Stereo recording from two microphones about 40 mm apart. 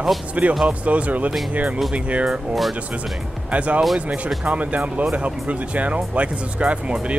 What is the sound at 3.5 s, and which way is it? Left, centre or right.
Speech, right.